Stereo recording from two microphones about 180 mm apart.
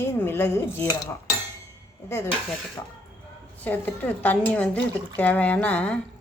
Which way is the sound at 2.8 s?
20° left (ahead or behind).